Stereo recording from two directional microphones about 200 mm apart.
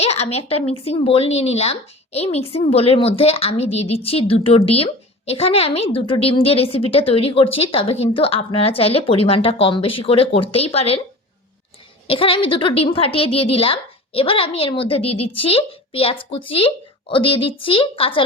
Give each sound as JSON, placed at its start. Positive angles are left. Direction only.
{"t": 0.0, "sound": "a woman's voice", "side_deg": 30}
{"t": 12.0, "sound": "a woman's voice", "side_deg": 25}